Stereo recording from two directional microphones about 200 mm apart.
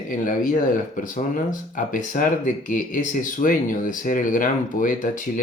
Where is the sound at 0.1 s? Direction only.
40° left (ahead or behind).